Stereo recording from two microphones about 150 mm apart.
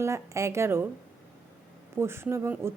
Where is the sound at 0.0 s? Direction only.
20° right (ahead or behind).